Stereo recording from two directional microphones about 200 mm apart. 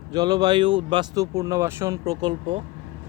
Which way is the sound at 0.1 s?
20° right (ahead or behind).